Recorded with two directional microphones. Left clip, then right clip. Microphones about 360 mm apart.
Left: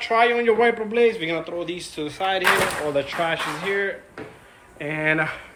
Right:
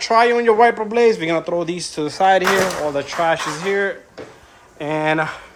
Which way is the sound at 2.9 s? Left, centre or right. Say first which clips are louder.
Right 4 dB; centre.